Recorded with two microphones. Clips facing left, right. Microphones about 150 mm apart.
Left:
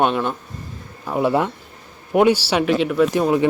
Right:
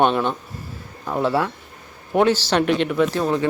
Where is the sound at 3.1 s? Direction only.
15° left (ahead or behind).